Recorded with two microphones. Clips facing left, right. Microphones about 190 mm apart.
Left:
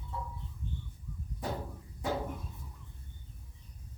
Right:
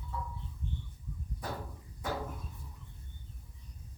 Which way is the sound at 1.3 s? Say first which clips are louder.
Left 4 dB; 20° left (ahead or behind).